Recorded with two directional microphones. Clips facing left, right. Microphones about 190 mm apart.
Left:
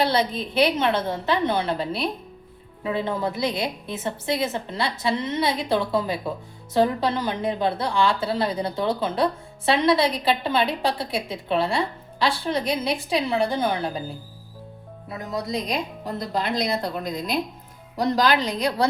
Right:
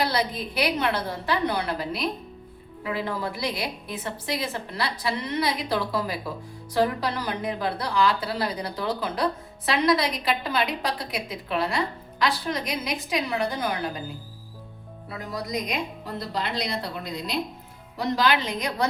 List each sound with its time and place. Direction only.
0.0 s a woman's voice: 25° left (ahead or behind)
15.1 s a woman's voice: 20° left (ahead or behind)